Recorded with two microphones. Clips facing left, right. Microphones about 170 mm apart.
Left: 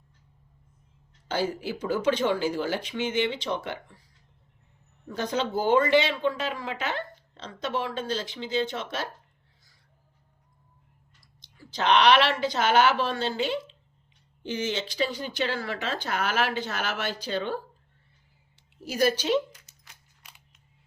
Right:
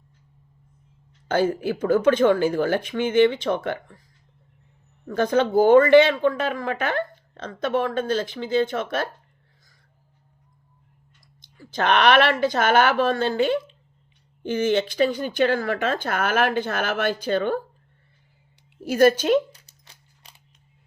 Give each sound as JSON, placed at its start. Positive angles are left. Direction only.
{"t": 1.3, "sound": "a woman's voice", "side_deg": -50}
{"t": 5.0, "sound": "a woman's voice", "side_deg": -50}
{"t": 11.2, "sound": "a woman's voice", "side_deg": -50}
{"t": 18.9, "sound": "a woman's voice", "side_deg": -55}
{"t": 19.5, "sound": "a sound", "side_deg": -30}